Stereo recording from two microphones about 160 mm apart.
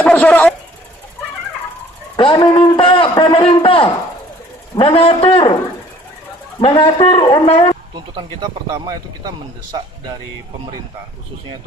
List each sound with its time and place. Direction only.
0.0 s a sound: 5° left (ahead or behind)
2.1 s a man's voice: 25° left (ahead or behind)
6.6 s a man's voice: 35° left (ahead or behind)
7.9 s speech: 30° right (ahead or behind)